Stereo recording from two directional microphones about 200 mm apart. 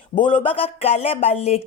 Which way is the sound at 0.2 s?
25° left (ahead or behind).